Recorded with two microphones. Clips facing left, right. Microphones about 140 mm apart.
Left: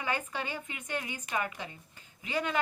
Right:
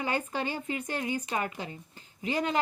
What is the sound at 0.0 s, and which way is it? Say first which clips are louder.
A woman's voice: right 4 dB; 35° right (ahead or behind).